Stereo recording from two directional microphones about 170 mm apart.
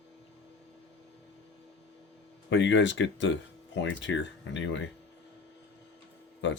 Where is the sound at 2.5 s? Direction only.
90° left.